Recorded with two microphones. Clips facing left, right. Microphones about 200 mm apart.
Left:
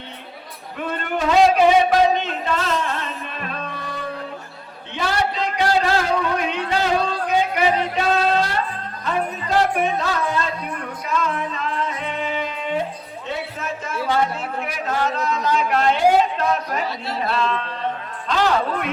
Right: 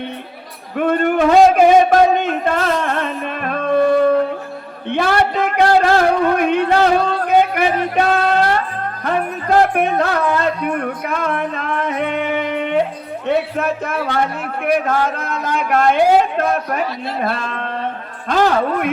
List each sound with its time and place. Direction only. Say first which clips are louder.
0.8 s a man's voice: right 10 dB; 55° right (ahead or behind)
4.9 s a sound: right 7 dB; 60° right (ahead or behind)
14.6 s a man's voice: right 8 dB; 55° right (ahead or behind)